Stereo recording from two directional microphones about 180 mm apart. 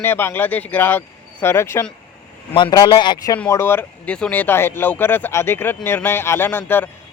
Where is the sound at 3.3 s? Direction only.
10° left (ahead or behind).